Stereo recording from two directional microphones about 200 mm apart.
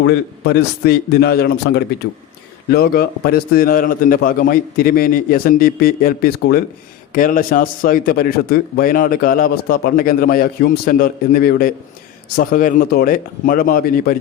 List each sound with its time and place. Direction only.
0.0 s a man's voice: 55° left (ahead or behind)